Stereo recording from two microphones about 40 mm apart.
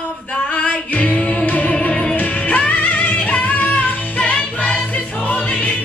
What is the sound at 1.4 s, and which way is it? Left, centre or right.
Music, left.